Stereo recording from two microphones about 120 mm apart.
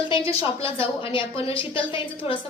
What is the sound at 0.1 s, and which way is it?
A woman's voice, 45° left (ahead or behind).